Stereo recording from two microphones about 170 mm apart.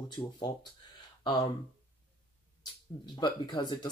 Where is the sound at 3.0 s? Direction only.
25° left (ahead or behind).